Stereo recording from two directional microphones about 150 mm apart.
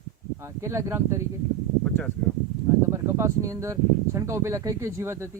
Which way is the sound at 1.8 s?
10° left (ahead or behind).